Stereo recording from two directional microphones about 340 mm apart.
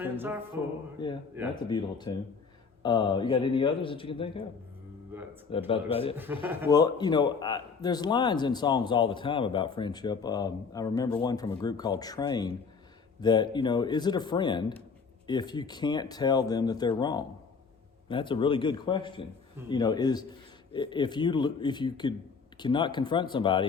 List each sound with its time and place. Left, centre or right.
0.0 s music: centre
0.5 s a man's voice: centre
5.5 s a man's voice: centre
6.4 s music: centre
6.7 s a man's voice: centre